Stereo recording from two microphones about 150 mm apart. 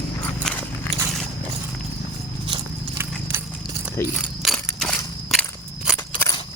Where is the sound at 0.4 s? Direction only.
Centre (ahead or behind).